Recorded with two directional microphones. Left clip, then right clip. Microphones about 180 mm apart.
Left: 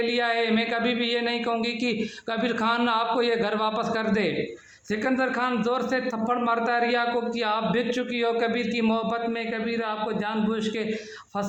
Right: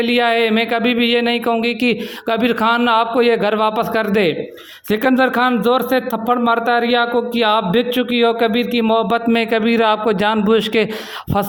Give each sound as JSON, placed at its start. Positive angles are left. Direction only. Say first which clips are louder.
{"t": 0.0, "sound": "a man's voice", "louder": "right 9 dB", "side_deg": -45}